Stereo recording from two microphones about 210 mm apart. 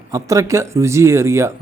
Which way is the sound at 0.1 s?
15° right (ahead or behind).